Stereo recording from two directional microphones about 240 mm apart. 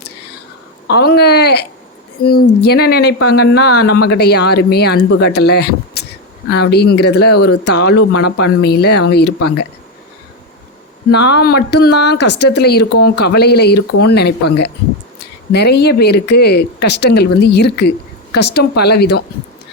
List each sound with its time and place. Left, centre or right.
0.9 s speech: left
2.2 s a woman's voice: left
2.6 s speech: left
11.1 s speech: left
15.5 s speech: left